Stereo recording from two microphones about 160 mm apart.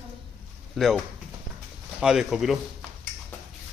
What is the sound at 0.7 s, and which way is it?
Speech, centre (ahead or behind).